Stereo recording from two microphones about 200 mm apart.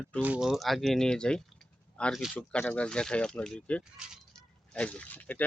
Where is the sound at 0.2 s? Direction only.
5° right (ahead or behind).